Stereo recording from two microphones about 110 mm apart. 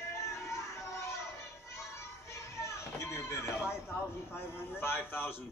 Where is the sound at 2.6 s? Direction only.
25° left (ahead or behind).